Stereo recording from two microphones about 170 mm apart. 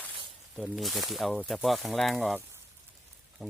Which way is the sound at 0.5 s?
Centre (ahead or behind).